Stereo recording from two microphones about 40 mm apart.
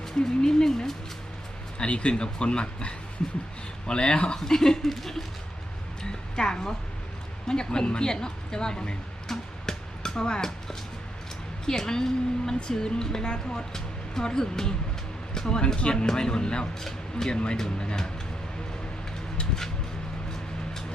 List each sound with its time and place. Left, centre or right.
0.2 s speech: centre
1.8 s a woman's voice: left; by 5.2 s centre
6.0 s music: centre
7.4 s a woman's voice: centre
9.3 s a sound: centre
11.6 s a woman's voice: centre
16.8 s speech: centre
17.3 s a woman's voice: left